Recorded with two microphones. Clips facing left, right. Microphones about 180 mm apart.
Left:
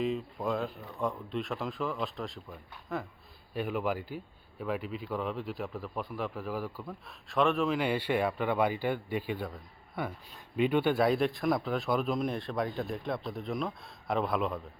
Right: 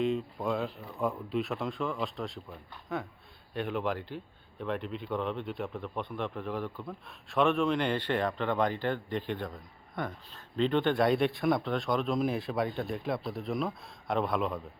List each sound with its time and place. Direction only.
0.0 s speech: centre (ahead or behind)